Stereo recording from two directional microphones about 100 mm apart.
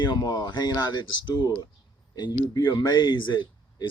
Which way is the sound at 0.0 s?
45° left (ahead or behind).